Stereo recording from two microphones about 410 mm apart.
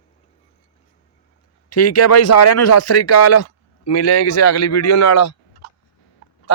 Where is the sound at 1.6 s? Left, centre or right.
Left.